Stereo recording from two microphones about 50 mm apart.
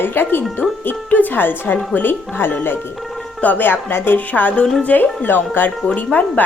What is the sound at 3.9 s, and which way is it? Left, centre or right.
Speech, left.